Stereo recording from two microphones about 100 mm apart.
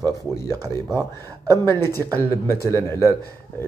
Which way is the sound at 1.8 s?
25° left (ahead or behind).